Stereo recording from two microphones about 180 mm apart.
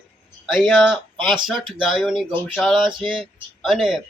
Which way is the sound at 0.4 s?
Centre (ahead or behind).